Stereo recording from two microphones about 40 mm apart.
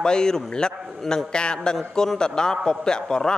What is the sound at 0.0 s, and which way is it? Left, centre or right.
A man's voice, centre.